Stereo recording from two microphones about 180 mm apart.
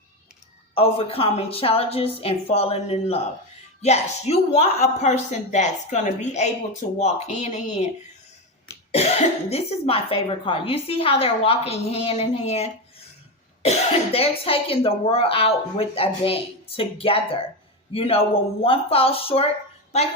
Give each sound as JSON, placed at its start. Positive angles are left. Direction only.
{"t": 0.8, "sound": "speech", "side_deg": 30}
{"t": 8.9, "sound": "speech", "side_deg": 35}
{"t": 13.7, "sound": "speech", "side_deg": 30}